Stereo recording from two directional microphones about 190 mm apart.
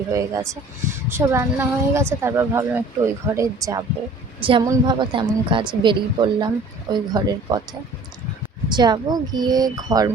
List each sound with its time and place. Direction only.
0.1 s a woman's voice: 15° right (ahead or behind)
4.4 s a woman's voice: 30° right (ahead or behind)